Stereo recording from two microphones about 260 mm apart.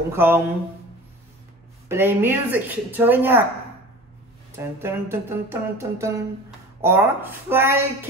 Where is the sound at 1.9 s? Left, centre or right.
Centre.